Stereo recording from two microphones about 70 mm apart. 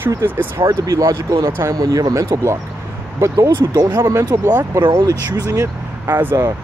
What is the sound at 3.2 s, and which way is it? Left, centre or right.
Speech, right.